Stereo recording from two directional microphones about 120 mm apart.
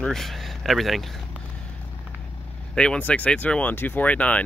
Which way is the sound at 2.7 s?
10° left (ahead or behind).